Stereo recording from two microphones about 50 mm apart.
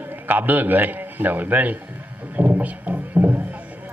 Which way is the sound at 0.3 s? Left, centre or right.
Right.